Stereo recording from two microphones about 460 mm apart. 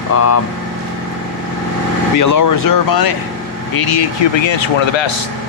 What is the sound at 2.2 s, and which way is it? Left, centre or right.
Speech, left.